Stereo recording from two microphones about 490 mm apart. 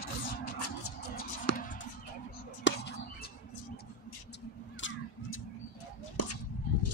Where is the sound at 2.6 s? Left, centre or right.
Left.